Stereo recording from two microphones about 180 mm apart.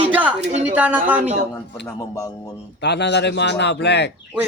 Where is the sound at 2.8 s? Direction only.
70° left (ahead or behind).